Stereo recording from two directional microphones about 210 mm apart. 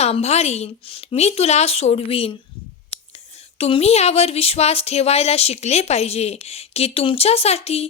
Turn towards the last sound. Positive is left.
turn(degrees=30)  # may be behind; listen again after turning